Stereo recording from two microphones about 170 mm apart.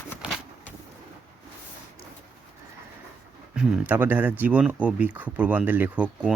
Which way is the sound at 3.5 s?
5° right (ahead or behind).